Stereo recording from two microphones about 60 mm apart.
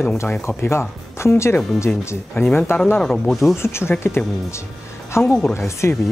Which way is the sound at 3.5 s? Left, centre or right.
Left.